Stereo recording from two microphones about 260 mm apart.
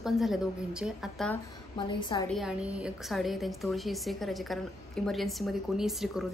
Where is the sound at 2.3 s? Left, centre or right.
Centre.